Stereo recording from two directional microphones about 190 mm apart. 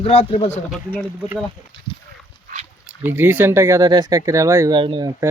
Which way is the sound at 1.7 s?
30° left (ahead or behind).